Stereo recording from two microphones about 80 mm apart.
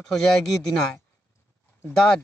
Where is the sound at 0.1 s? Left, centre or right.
Centre.